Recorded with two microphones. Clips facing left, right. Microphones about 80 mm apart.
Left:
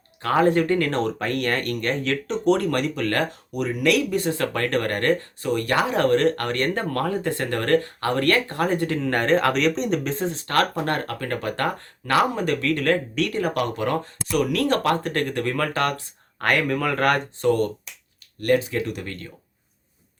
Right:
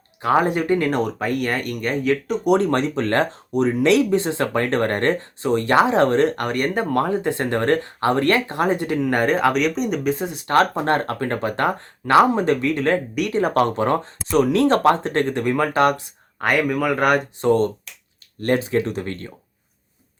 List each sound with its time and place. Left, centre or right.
0.2 s speech: centre
2.6 s speech: right
13.4 s speech: right; by 17.5 s centre
18.3 s speech: right